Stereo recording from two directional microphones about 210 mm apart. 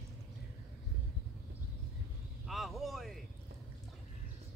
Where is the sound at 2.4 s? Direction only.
Centre (ahead or behind).